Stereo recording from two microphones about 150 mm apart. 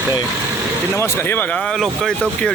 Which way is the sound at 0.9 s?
15° left (ahead or behind).